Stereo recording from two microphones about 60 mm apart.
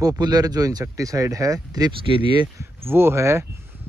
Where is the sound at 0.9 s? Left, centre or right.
Right.